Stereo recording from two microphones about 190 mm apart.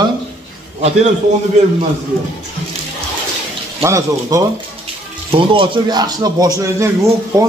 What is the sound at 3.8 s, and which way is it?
Speech, 15° right (ahead or behind).